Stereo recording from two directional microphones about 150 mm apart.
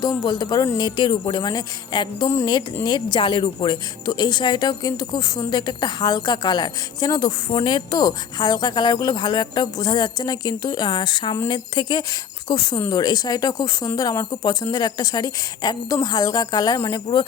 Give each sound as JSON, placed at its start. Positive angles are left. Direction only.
{"t": 0.3, "sound": "speech", "side_deg": 30}